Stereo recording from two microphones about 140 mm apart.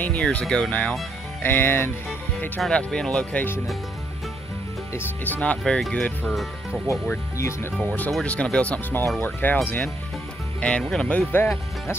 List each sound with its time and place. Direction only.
0.0 s speech: 10° left (ahead or behind)
4.9 s speech: 15° left (ahead or behind); by 6.8 s 5° right (ahead or behind)
7.3 s speech: 20° left (ahead or behind)
7.9 s speech: 5° left (ahead or behind)